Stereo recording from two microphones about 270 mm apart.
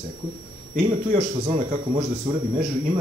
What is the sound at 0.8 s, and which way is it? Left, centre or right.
Speech, right.